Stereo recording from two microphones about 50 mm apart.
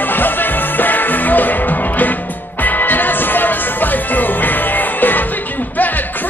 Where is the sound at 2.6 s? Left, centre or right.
Left.